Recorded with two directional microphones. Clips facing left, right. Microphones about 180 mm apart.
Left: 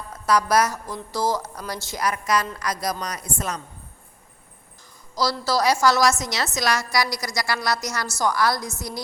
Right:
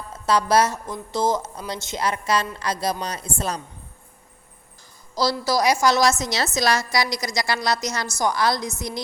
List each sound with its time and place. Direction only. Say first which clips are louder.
0.1 s a woman's voice: right 1 dB; 25° right (ahead or behind)
5.1 s a woman's voice: right 2 dB; 25° right (ahead or behind)
5.5 s a woman's voice: even; 15° right (ahead or behind)